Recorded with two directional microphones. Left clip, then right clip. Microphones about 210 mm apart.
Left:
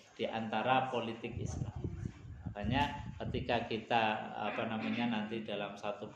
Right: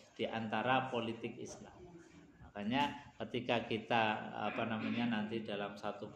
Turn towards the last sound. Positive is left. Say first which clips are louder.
# left 2 dB
turn(degrees=-15)  # may be behind; listen again after turning